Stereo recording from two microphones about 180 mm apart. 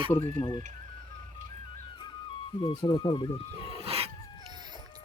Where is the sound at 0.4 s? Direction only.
25° left (ahead or behind).